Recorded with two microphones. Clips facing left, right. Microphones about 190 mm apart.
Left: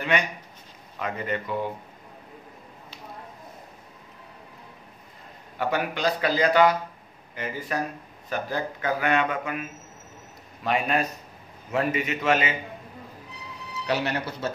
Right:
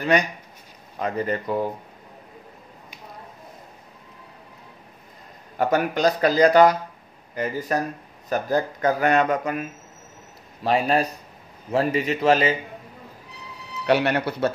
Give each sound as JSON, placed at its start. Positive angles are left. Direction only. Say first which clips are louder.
{"t": 0.0, "sound": "speech", "louder": "right 5 dB", "side_deg": -40}
{"t": 5.6, "sound": "speech", "louder": "right 6 dB", "side_deg": -45}
{"t": 13.8, "sound": "speech", "louder": "right 7 dB", "side_deg": -65}